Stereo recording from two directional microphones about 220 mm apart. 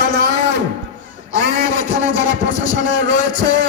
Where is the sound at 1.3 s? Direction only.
35° left (ahead or behind).